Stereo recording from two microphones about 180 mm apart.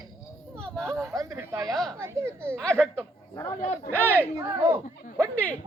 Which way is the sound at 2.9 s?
15° left (ahead or behind).